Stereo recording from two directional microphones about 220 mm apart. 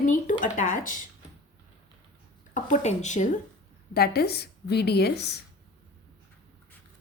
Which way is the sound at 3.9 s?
45° left (ahead or behind).